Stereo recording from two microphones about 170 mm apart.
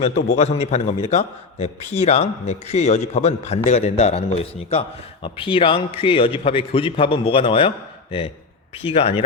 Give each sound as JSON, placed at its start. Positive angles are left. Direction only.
{"t": 0.3, "sound": "a man's voice", "side_deg": 40}
{"t": 8.8, "sound": "a man's voice", "side_deg": 35}